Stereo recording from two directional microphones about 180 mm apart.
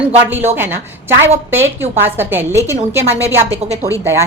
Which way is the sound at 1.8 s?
10° right (ahead or behind).